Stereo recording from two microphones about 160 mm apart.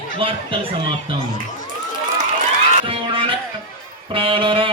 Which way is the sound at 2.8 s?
35° right (ahead or behind).